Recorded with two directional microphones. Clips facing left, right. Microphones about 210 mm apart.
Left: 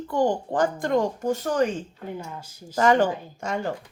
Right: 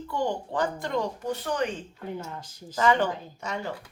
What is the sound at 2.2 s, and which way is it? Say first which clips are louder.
Speech: left 1 dB; 10° left (ahead or behind).